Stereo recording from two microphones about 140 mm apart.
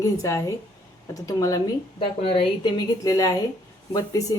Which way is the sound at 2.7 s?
25° left (ahead or behind).